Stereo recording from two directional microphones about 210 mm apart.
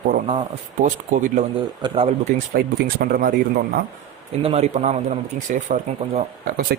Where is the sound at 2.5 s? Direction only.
45° right (ahead or behind).